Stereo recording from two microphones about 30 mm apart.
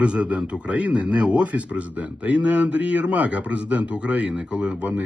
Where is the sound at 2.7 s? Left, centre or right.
Right.